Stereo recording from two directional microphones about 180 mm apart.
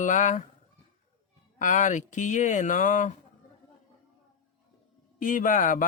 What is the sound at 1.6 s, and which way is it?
Speech, 45° left (ahead or behind).